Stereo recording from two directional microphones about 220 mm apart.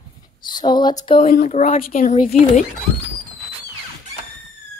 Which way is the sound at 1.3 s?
35° left (ahead or behind).